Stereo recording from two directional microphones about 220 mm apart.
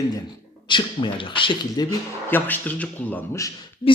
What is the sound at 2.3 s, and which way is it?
A man's voice, 10° left (ahead or behind).